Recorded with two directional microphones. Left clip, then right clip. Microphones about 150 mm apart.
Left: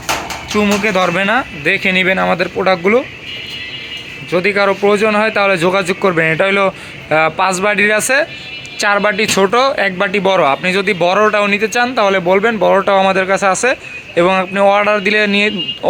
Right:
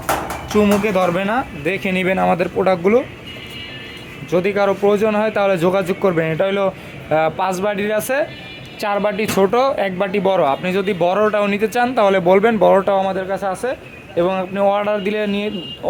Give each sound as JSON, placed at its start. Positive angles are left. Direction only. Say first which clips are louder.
{"t": 0.5, "sound": "a man's voice", "louder": "left 2 dB", "side_deg": -5}
{"t": 4.3, "sound": "a man's voice", "louder": "left 4 dB", "side_deg": 0}
{"t": 13.0, "sound": "a man's voice", "louder": "left 8 dB", "side_deg": 15}